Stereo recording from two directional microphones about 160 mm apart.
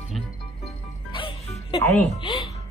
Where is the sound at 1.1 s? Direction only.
30° left (ahead or behind).